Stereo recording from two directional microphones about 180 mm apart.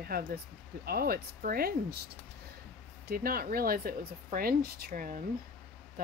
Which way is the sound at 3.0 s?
55° right (ahead or behind).